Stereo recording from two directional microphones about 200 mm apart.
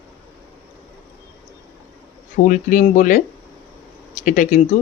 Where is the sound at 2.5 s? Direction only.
40° left (ahead or behind).